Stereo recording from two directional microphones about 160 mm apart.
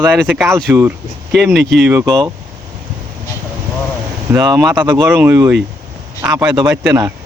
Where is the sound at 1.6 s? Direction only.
90° right.